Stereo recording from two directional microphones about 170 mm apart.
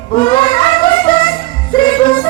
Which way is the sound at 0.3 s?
30° left (ahead or behind).